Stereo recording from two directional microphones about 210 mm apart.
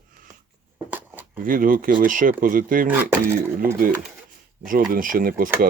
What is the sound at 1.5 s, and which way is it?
Speech, 40° right (ahead or behind).